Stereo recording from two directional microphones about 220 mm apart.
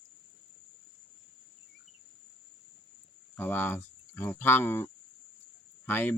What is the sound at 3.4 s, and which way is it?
Speech, 10° left (ahead or behind).